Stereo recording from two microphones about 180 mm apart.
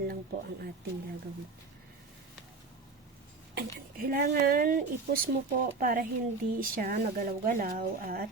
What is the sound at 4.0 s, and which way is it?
Speech, 55° right (ahead or behind).